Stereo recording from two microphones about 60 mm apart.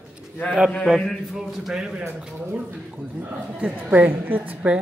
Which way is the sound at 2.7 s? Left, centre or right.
Right.